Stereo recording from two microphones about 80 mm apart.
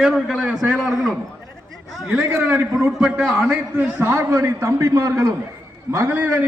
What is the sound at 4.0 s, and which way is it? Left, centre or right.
A man's voice, right.